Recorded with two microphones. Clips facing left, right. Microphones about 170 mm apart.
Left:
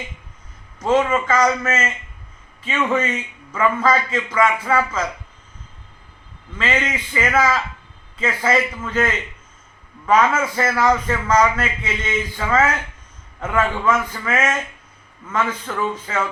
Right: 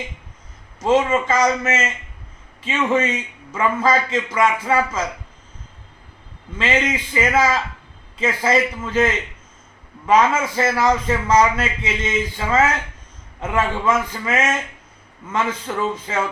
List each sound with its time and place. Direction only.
0.9 s a man's voice: 15° right (ahead or behind)
6.6 s a man's voice: 20° right (ahead or behind)
8.8 s a man's voice: 25° right (ahead or behind)
15.4 s a man's voice: 15° right (ahead or behind)